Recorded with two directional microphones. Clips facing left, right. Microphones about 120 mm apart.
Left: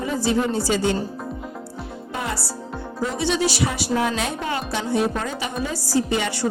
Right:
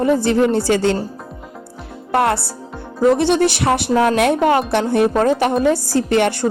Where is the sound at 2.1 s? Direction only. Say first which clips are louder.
Right 13 dB; 70° right (ahead or behind).